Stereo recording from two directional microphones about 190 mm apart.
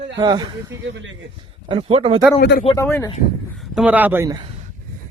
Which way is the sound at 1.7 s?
30° right (ahead or behind).